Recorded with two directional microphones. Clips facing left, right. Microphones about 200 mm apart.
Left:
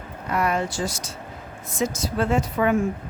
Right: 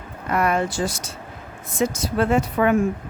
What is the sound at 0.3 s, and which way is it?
Speech, 55° right (ahead or behind).